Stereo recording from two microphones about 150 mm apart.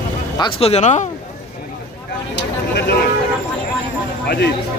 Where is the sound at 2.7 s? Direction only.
90° left.